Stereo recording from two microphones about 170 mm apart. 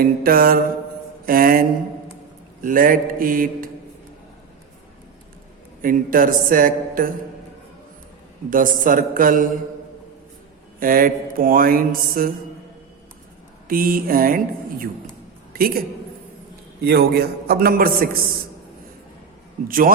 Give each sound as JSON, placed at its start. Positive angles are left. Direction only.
{"t": 0.0, "sound": "mantra", "side_deg": -60}
{"t": 5.8, "sound": "mantra", "side_deg": -55}
{"t": 8.4, "sound": "a man's voice", "side_deg": -50}
{"t": 10.8, "sound": "mantra", "side_deg": -55}
{"t": 13.7, "sound": "mantra", "side_deg": -55}
{"t": 15.5, "sound": "a man's voice", "side_deg": -60}
{"t": 16.8, "sound": "mantra", "side_deg": -70}
{"t": 19.6, "sound": "mantra", "side_deg": -55}